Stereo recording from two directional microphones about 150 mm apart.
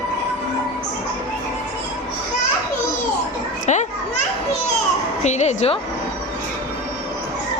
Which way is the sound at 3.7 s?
50° left (ahead or behind).